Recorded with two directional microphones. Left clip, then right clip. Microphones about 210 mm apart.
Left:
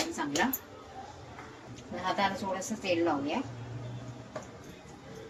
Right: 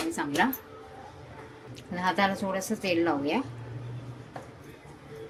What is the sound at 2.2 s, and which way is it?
Speech, 55° right (ahead or behind).